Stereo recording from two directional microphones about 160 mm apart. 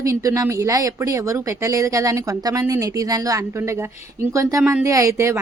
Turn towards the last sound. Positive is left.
turn(degrees=-15)  # may be behind; listen again after turning